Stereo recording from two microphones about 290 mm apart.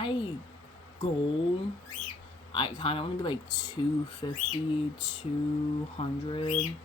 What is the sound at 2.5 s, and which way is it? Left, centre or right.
Speech, centre.